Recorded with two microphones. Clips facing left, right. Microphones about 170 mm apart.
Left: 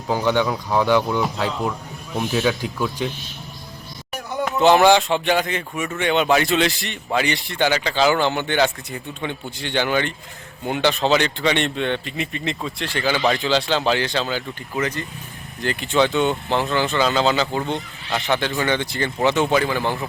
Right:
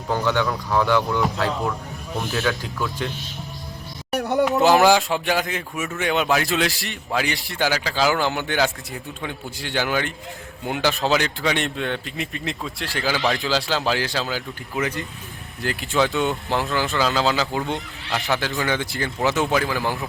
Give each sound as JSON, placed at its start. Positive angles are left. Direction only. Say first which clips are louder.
{"t": 0.1, "sound": "speech", "louder": "left 2 dB", "side_deg": 15}
{"t": 4.1, "sound": "a sound", "louder": "right 6 dB", "side_deg": -70}
{"t": 4.6, "sound": "speech", "louder": "left 4 dB", "side_deg": -5}